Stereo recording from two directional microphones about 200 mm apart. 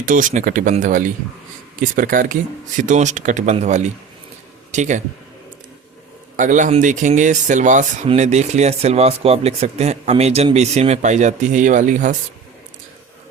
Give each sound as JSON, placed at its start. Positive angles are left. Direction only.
{"t": 0.0, "sound": "speech", "side_deg": -40}
{"t": 6.3, "sound": "speech", "side_deg": -40}